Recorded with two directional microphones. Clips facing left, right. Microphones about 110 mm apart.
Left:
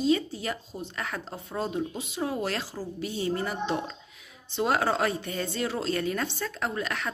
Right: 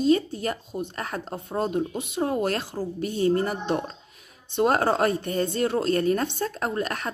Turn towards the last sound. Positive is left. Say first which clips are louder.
# right 3 dB
turn(degrees=-45)  # may be behind; listen again after turning